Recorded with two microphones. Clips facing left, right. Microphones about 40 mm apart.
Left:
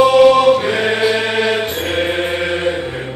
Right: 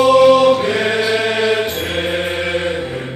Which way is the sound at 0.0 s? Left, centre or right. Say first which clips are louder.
Even; centre.